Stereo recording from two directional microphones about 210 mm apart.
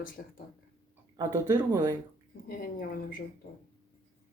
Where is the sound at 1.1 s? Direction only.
15° right (ahead or behind).